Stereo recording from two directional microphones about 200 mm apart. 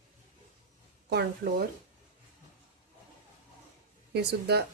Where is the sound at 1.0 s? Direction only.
55° right (ahead or behind).